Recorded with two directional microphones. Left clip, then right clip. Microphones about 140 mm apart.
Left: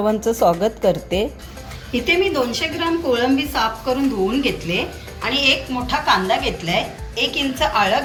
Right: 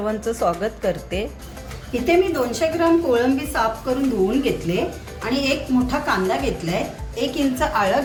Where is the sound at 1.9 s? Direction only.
60° right (ahead or behind).